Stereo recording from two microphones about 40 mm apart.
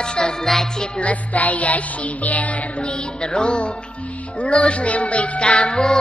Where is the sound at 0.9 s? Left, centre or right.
Left.